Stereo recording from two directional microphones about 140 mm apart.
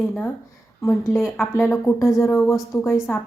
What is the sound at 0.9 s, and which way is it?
Speech, 15° left (ahead or behind).